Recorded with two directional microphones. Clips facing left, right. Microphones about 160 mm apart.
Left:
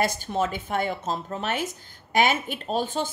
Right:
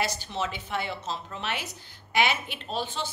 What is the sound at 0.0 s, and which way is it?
A woman's voice, 50° left (ahead or behind).